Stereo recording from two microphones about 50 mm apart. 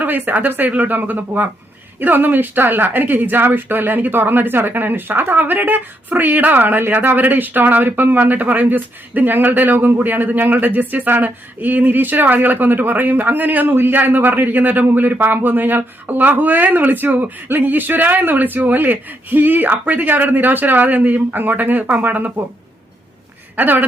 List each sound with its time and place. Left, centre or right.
0.0 s speech: right
23.6 s speech: right